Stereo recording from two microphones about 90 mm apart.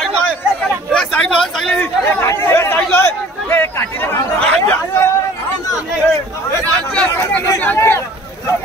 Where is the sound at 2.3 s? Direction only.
35° left (ahead or behind).